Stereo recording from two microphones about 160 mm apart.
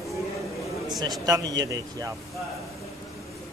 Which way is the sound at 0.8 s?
25° right (ahead or behind).